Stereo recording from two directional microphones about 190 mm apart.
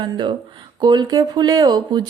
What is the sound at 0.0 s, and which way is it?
Speech, 25° right (ahead or behind).